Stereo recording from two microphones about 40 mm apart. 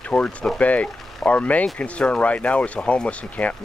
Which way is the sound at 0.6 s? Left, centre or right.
Left.